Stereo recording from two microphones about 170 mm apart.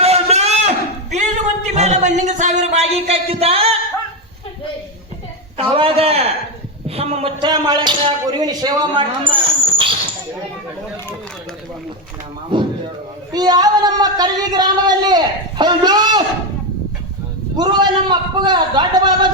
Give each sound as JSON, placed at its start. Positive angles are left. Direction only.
{"t": 0.0, "sound": "a sound", "side_deg": -35}
{"t": 1.7, "sound": "speech", "side_deg": -40}
{"t": 5.5, "sound": "a man's voice", "side_deg": -35}
{"t": 12.5, "sound": "slam", "side_deg": -30}
{"t": 13.3, "sound": "a sound", "side_deg": -20}
{"t": 17.6, "sound": "a man's voice", "side_deg": -25}